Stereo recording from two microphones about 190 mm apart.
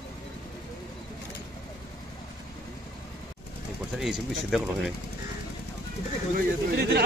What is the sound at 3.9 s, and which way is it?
Speech, centre (ahead or behind).